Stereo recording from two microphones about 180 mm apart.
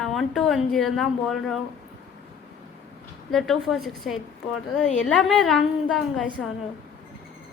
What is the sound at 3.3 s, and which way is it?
A woman's voice, centre (ahead or behind).